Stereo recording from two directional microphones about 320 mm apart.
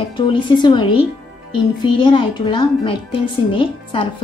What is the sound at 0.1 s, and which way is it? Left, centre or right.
Speech, centre.